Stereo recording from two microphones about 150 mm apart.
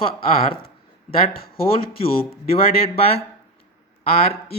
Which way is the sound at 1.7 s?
40° left (ahead or behind).